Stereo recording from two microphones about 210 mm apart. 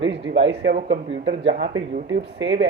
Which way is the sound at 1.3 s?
30° right (ahead or behind).